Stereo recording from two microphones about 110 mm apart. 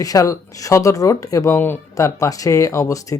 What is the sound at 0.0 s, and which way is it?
A man's voice, 30° left (ahead or behind).